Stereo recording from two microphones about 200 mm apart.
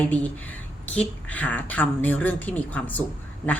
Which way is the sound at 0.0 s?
5° left (ahead or behind).